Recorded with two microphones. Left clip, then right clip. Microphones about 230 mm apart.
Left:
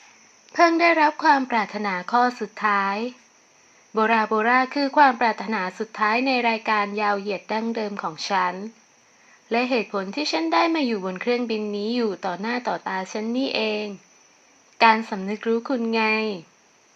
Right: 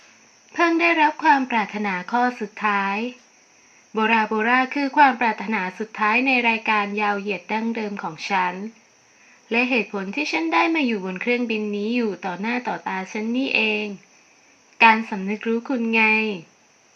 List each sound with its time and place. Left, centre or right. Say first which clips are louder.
0.5 s speech: left 1 dB; left